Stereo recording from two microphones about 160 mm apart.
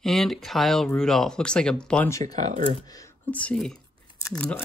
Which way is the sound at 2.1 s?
20° left (ahead or behind).